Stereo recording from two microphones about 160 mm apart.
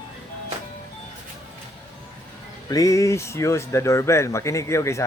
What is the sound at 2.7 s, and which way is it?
Speech, 20° left (ahead or behind).